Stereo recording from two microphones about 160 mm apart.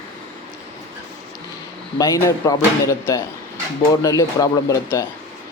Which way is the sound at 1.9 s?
20° left (ahead or behind).